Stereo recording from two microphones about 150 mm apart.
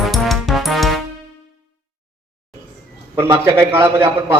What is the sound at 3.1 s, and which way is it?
A man's voice, 15° right (ahead or behind).